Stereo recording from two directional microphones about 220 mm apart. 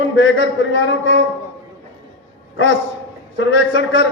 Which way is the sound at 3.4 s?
55° left (ahead or behind).